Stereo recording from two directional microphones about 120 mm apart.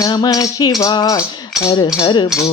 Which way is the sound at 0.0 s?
35° left (ahead or behind).